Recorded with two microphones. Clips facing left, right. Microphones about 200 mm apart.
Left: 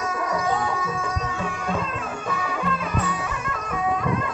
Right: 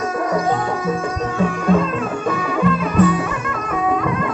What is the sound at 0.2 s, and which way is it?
Music, 50° right (ahead or behind).